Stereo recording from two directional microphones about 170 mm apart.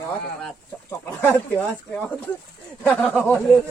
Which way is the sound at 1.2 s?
10° left (ahead or behind).